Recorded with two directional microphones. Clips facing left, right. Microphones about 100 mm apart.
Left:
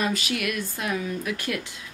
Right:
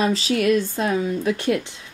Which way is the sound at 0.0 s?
30° right (ahead or behind).